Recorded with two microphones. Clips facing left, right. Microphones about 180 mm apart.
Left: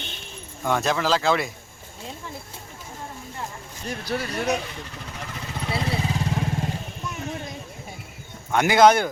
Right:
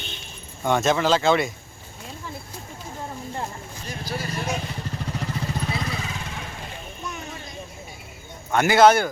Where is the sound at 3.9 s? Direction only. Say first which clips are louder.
Left 3 dB; 60° left (ahead or behind).